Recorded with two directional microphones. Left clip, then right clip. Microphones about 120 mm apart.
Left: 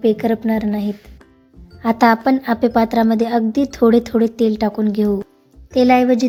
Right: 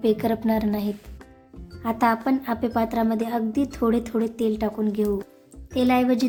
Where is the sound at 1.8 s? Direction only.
45° left (ahead or behind); by 6.2 s 25° left (ahead or behind).